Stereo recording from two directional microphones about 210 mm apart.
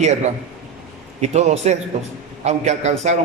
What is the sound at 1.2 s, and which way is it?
A man's voice, 30° right (ahead or behind).